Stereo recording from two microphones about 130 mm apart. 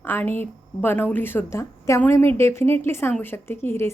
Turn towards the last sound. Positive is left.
turn(degrees=20)  # may be behind; listen again after turning